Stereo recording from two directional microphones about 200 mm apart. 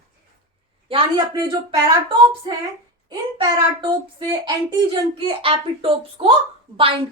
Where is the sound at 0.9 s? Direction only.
20° right (ahead or behind).